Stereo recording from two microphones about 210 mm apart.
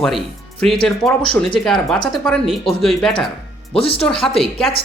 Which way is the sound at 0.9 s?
Centre (ahead or behind).